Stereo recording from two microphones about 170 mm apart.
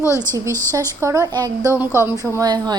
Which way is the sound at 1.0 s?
20° right (ahead or behind).